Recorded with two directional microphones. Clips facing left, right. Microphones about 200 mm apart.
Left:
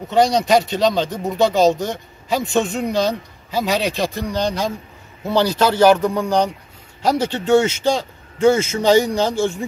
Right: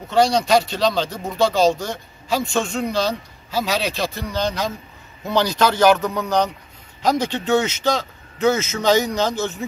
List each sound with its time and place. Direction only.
0.1 s speech: 15° left (ahead or behind)
2.4 s a man's voice: 5° left (ahead or behind)
2.9 s speech: 15° left (ahead or behind)